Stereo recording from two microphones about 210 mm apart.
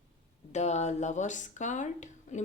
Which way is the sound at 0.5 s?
35° left (ahead or behind).